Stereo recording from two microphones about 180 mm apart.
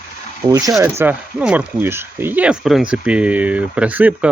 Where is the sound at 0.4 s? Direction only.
20° right (ahead or behind).